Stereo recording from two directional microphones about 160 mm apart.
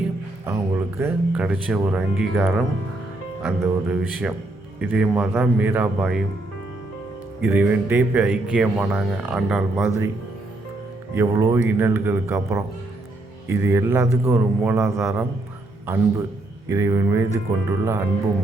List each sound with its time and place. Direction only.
0.4 s speech: 15° right (ahead or behind)
7.4 s speech: 10° right (ahead or behind)
11.1 s speech: 15° right (ahead or behind)